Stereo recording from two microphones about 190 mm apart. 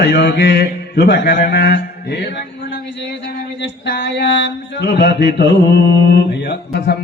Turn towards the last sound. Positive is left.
turn(degrees=60)  # may be behind; listen again after turning